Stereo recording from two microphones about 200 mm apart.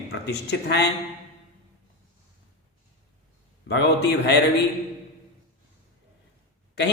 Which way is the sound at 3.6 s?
55° left (ahead or behind).